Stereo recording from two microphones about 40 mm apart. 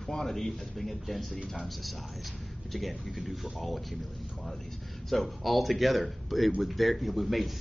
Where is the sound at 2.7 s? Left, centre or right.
Centre.